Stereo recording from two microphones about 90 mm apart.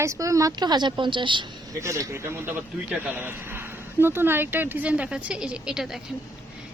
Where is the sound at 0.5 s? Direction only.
55° right (ahead or behind).